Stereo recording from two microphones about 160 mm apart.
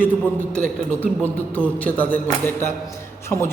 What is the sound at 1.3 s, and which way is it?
Speech, 10° left (ahead or behind).